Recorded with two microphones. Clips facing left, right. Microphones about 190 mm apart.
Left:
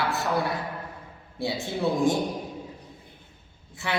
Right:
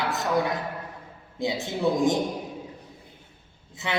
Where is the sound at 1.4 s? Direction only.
15° right (ahead or behind).